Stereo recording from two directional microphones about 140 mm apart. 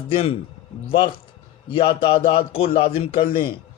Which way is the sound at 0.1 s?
40° left (ahead or behind).